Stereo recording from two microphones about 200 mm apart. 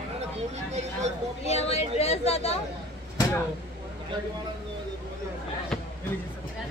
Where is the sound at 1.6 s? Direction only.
30° left (ahead or behind).